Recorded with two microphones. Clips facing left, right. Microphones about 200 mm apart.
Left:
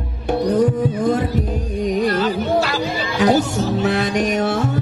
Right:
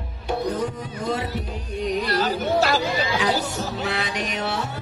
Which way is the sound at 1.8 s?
45° left (ahead or behind).